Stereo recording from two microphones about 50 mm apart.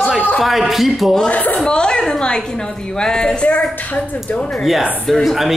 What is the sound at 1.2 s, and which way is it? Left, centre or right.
A woman's voice, left.